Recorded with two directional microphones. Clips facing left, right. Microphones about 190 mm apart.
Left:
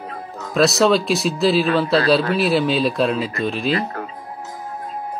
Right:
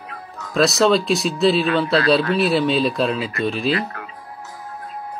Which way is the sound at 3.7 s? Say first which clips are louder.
Left 2 dB; 35° left (ahead or behind).